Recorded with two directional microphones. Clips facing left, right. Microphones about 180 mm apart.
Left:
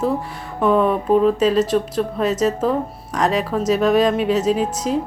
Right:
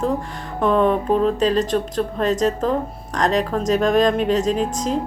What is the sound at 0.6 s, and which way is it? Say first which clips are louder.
A woman's voice: left 1 dB; 5° left (ahead or behind).